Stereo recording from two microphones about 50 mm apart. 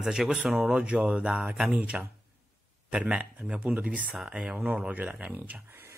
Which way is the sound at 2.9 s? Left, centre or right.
Right.